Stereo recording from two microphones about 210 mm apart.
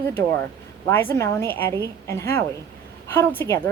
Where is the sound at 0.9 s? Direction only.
10° left (ahead or behind).